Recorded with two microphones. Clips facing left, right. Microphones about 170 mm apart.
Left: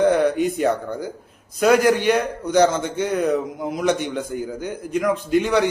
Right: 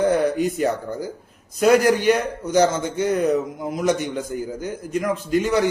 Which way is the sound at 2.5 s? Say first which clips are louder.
Left 1 dB; 10° right (ahead or behind).